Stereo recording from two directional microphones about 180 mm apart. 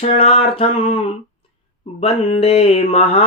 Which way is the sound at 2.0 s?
35° left (ahead or behind).